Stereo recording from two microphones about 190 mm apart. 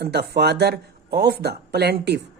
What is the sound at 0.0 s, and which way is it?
Speech, 60° right (ahead or behind).